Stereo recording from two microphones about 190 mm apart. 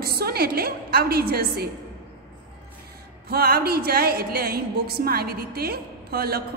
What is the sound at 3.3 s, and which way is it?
A woman's voice, 55° right (ahead or behind).